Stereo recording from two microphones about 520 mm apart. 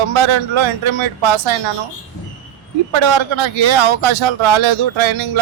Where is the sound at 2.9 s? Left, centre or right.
Right.